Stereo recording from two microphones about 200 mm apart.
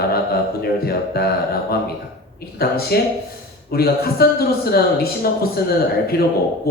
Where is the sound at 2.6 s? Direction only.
50° left (ahead or behind).